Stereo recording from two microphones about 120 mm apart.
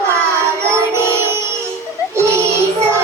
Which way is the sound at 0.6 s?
20° right (ahead or behind).